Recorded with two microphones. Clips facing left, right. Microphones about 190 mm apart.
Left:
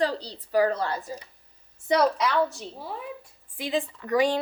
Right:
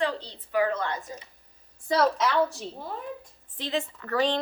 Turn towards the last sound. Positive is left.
turn(degrees=15)  # may be behind; listen again after turning